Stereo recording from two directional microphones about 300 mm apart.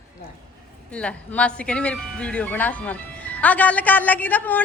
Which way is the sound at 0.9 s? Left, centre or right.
Centre.